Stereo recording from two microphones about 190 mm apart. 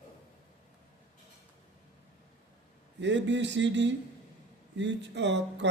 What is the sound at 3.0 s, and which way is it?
Speech, 70° right (ahead or behind).